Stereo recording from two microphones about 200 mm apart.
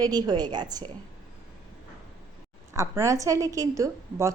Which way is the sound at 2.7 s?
15° right (ahead or behind).